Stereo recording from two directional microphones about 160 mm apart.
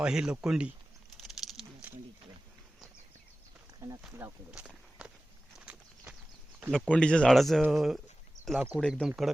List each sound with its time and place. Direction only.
0.0 s speech: 5° right (ahead or behind)
1.2 s a sound: centre (ahead or behind)
3.8 s speech: 25° right (ahead or behind)
4.2 s speech: 5° right (ahead or behind)
5.5 s a sound: 5° right (ahead or behind)
6.7 s speech: 5° left (ahead or behind)